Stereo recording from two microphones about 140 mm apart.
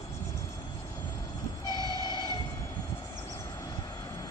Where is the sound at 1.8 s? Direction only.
30° left (ahead or behind).